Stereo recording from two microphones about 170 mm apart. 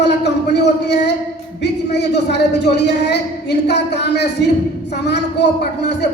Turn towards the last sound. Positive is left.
turn(degrees=85)